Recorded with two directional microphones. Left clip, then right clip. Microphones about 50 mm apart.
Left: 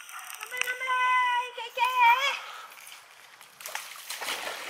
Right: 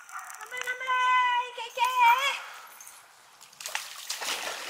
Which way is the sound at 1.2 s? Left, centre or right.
Centre.